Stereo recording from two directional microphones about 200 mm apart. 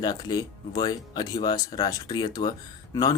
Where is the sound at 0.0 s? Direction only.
20° left (ahead or behind).